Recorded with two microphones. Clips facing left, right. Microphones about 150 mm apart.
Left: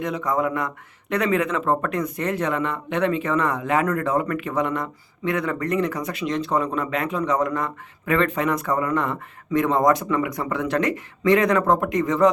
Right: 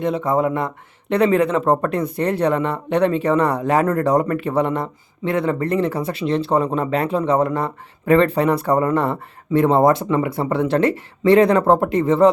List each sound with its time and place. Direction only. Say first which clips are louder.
0.0 s speech: right 5 dB; 30° right (ahead or behind)